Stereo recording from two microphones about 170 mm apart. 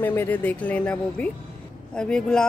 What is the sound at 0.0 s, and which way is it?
Speech, 10° left (ahead or behind).